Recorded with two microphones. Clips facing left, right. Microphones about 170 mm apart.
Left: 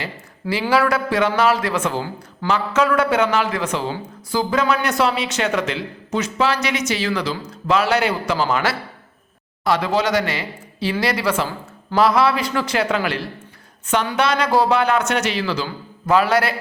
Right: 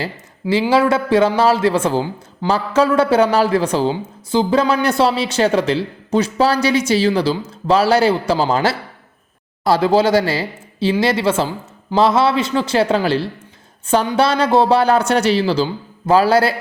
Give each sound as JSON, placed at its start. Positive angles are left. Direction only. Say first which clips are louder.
{"t": 0.7, "sound": "a man's voice", "louder": "right 3 dB", "side_deg": -25}